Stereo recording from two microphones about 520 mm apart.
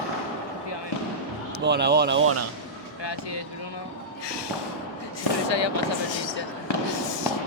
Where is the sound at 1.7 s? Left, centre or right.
Centre.